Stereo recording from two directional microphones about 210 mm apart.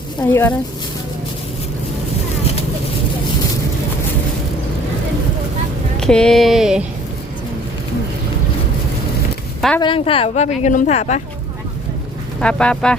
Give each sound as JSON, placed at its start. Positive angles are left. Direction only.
{"t": 0.2, "sound": "speech", "side_deg": 10}
{"t": 6.0, "sound": "a sound", "side_deg": 5}
{"t": 9.6, "sound": "speech", "side_deg": 5}
{"t": 9.8, "sound": "a woman's voice", "side_deg": 25}
{"t": 12.4, "sound": "speech", "side_deg": 5}